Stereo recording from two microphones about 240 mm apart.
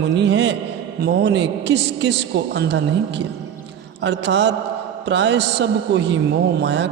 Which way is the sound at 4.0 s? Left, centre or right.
Right.